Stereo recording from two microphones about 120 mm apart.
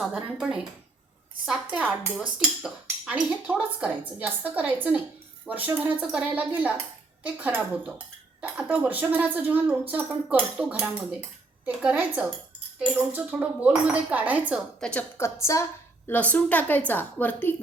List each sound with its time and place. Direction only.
0.0 s a woman's voice: 5° right (ahead or behind)
14.8 s a woman's voice: 10° left (ahead or behind)
15.5 s a woman's voice: 25° left (ahead or behind)
16.0 s a woman's voice: 15° left (ahead or behind)